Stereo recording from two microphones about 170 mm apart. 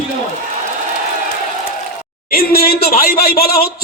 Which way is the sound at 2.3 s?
60° left (ahead or behind).